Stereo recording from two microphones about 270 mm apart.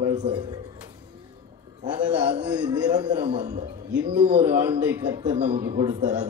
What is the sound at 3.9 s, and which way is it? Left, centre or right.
Music, centre.